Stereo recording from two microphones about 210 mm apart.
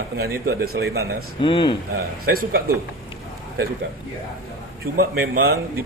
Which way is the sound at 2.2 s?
45° right (ahead or behind).